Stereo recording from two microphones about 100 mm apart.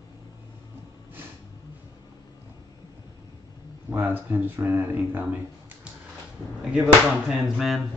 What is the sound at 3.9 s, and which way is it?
Speech, 20° right (ahead or behind).